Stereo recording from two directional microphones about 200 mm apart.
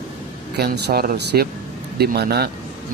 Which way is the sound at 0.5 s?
55° right (ahead or behind).